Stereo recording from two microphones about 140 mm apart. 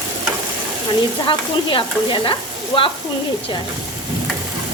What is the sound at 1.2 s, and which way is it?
Frying, 35° left (ahead or behind).